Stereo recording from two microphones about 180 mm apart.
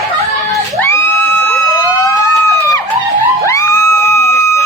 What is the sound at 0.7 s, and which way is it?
Crowd, 15° left (ahead or behind).